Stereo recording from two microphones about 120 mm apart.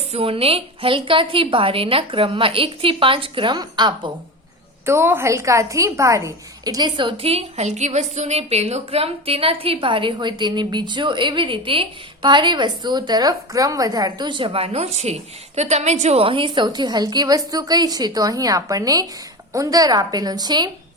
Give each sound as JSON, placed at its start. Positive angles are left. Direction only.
{"t": 0.1, "sound": "a woman's voice", "side_deg": -55}
{"t": 4.9, "sound": "a woman's voice", "side_deg": -20}